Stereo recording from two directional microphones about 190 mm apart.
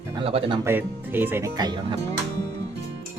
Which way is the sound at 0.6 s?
10° right (ahead or behind).